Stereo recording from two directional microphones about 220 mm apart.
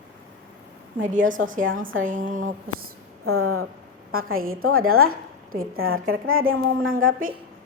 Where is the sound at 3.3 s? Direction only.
80° right.